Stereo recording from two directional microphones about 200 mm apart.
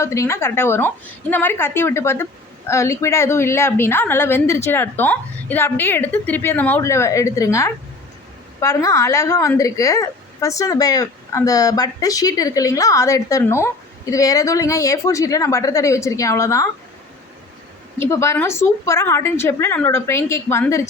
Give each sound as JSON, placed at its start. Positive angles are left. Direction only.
{"t": 0.0, "sound": "a woman's voice", "side_deg": 15}
{"t": 17.9, "sound": "a woman's voice", "side_deg": 15}